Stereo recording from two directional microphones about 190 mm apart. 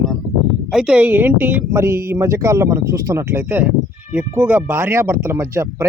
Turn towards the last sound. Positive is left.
turn(degrees=-15)  # may be behind; listen again after turning